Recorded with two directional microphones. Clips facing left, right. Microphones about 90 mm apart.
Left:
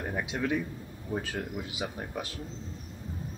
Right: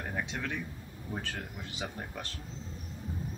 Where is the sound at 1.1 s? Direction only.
5° left (ahead or behind).